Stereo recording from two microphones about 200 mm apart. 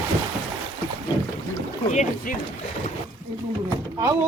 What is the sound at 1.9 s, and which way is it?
Speech, 35° left (ahead or behind).